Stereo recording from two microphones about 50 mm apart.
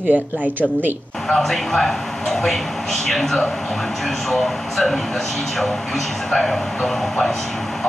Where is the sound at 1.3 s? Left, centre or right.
Centre.